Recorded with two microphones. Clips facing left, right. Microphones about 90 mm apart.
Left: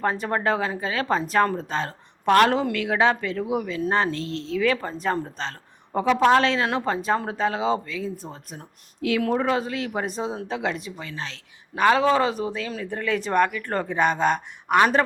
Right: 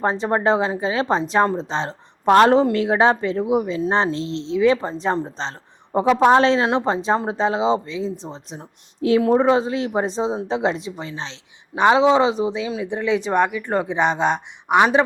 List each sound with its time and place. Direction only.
0.0 s speech: 25° right (ahead or behind); by 14.8 s 10° right (ahead or behind)